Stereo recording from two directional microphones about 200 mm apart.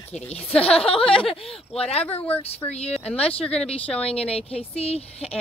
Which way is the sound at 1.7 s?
30° left (ahead or behind).